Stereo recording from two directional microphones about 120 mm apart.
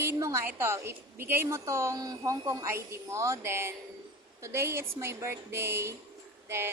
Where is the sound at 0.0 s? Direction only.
25° right (ahead or behind).